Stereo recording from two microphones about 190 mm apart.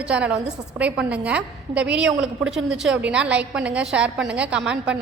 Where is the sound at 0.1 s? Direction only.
5° right (ahead or behind).